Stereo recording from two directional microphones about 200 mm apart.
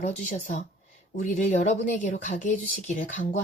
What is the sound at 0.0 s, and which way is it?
Speech, 40° left (ahead or behind).